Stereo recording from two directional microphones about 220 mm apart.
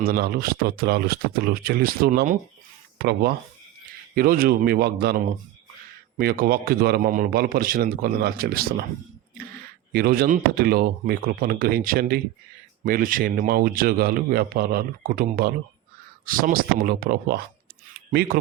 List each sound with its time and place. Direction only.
0.0 s speech: 45° right (ahead or behind)
6.1 s speech: 40° right (ahead or behind)
17.9 s a sound: 45° right (ahead or behind)